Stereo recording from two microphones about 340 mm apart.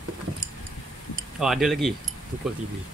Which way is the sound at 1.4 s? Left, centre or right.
Centre.